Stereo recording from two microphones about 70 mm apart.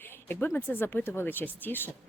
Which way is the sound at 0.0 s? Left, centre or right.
Left.